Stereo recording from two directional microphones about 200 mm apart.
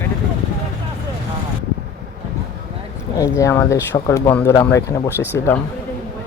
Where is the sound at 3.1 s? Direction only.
15° left (ahead or behind).